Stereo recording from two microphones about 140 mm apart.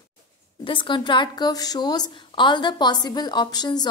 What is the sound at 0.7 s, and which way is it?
A woman's voice, 35° left (ahead or behind).